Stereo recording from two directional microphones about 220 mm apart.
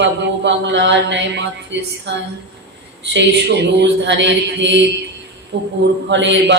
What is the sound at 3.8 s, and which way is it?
Speech, 55° right (ahead or behind).